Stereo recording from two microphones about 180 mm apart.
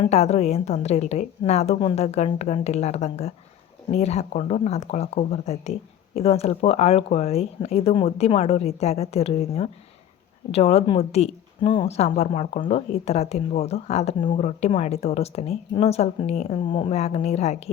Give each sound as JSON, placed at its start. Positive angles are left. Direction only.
{"t": 0.0, "sound": "a woman's voice", "side_deg": 35}